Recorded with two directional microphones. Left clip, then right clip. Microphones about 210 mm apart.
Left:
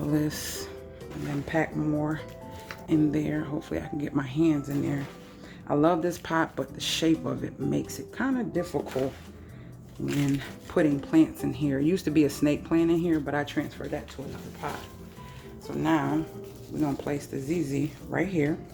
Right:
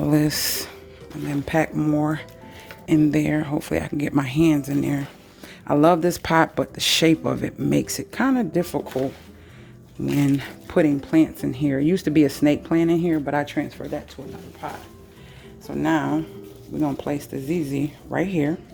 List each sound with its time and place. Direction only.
0.1 s speech: 40° right (ahead or behind)
10.3 s speech: 40° right (ahead or behind)